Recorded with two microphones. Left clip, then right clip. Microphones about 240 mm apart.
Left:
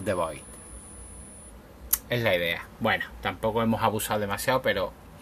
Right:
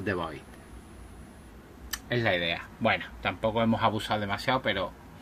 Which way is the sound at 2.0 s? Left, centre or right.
Centre.